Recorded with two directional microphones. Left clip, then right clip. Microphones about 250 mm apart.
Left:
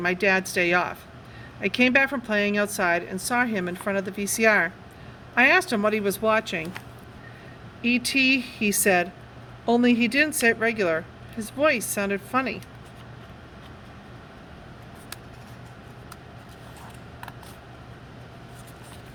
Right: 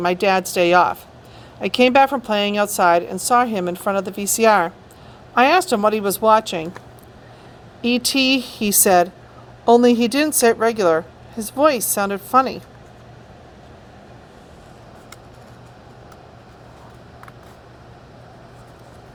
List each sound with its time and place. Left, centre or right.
0.0 s speech: right
7.8 s speech: right